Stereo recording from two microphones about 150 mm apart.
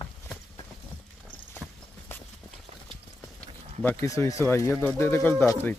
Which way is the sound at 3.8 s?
20° left (ahead or behind).